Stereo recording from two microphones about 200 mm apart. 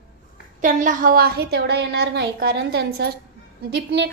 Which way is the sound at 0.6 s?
40° right (ahead or behind).